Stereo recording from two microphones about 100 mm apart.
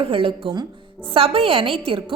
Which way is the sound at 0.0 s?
65° right (ahead or behind).